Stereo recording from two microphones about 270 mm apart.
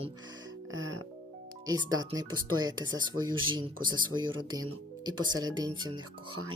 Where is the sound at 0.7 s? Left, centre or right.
Right.